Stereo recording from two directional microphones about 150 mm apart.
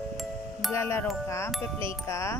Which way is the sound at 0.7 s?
15° left (ahead or behind).